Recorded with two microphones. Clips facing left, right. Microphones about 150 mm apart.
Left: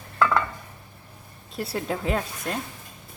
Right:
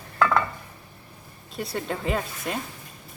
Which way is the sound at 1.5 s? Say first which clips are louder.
Left 1 dB; 5° left (ahead or behind).